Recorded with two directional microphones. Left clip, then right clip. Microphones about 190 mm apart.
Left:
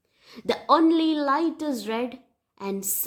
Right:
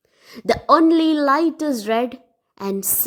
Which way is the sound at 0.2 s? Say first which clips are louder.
Right 7 dB; 30° right (ahead or behind).